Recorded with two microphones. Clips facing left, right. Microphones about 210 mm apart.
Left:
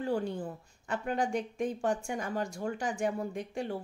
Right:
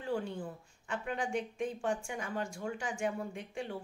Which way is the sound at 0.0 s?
40° left (ahead or behind).